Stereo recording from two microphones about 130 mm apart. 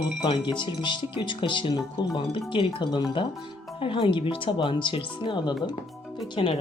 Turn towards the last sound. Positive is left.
turn(degrees=45)  # may be behind; listen again after turning